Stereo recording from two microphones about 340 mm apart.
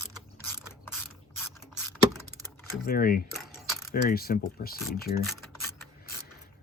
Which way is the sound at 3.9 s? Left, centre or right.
Left.